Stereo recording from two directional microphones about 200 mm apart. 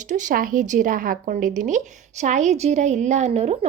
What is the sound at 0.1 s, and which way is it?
A woman's voice, 40° right (ahead or behind).